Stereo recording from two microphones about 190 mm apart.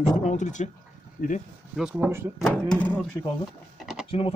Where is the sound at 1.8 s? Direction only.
5° right (ahead or behind).